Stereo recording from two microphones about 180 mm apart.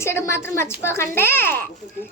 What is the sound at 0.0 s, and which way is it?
A woman's voice, 15° left (ahead or behind).